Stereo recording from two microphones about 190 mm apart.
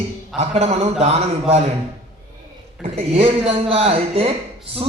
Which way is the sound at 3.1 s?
30° right (ahead or behind).